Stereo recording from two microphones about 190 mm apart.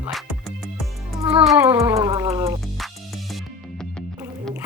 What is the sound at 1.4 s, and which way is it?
Speech, 10° right (ahead or behind).